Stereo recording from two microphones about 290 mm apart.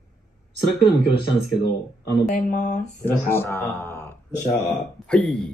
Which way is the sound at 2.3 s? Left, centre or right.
Left.